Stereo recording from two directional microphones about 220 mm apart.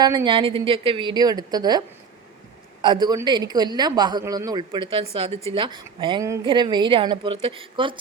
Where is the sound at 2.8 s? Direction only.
20° right (ahead or behind).